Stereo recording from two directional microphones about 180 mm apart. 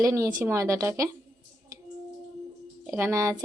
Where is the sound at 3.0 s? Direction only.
15° right (ahead or behind).